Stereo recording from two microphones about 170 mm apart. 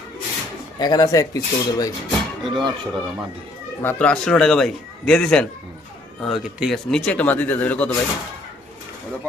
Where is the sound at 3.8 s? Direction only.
10° left (ahead or behind).